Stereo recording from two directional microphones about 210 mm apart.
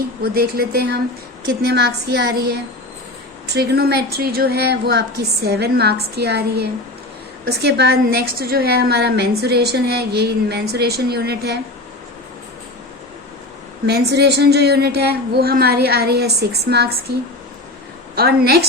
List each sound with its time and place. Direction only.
0.2 s a woman's voice: 50° right (ahead or behind)
13.8 s a woman's voice: 50° right (ahead or behind)
18.1 s a woman's voice: 50° right (ahead or behind)